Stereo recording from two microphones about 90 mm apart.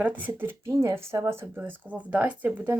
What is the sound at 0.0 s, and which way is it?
Speech, 20° right (ahead or behind).